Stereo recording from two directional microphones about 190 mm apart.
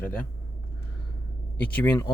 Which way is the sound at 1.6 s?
10° left (ahead or behind).